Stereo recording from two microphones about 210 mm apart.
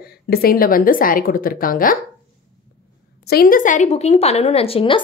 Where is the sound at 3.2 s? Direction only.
45° left (ahead or behind); by 5.0 s 25° left (ahead or behind).